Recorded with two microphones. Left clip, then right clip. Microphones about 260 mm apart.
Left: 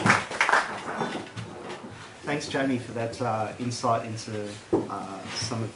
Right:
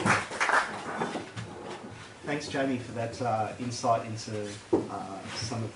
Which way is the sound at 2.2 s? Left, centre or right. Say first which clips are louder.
Left 3 dB; centre.